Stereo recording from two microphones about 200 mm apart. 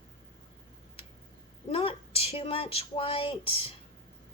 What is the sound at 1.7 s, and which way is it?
Speech, 30° left (ahead or behind).